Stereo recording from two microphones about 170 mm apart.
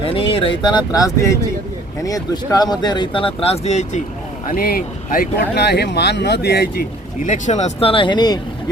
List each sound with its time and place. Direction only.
0.0 s speech: 30° left (ahead or behind)
4.4 s speech: 60° left (ahead or behind)
7.3 s speech: 45° left (ahead or behind); by 8.4 s 25° left (ahead or behind)